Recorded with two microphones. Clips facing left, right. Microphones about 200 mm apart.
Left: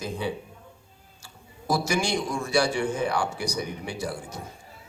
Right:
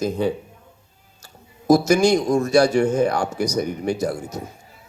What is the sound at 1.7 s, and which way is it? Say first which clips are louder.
A man's voice: right 11 dB; 40° right (ahead or behind).